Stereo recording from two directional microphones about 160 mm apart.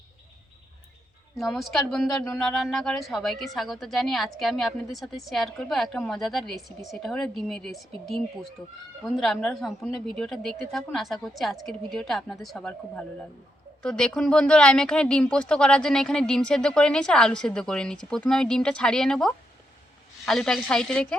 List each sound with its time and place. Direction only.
1.4 s a woman's voice: centre (ahead or behind)